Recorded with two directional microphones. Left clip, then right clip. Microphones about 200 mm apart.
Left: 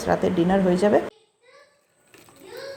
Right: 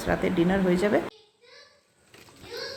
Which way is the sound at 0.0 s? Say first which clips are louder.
Left 4 dB; 5° left (ahead or behind).